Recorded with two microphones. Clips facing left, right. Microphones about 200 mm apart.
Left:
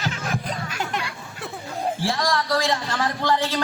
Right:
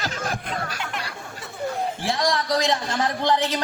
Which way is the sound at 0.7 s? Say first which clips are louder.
Left 4 dB; 40° left (ahead or behind).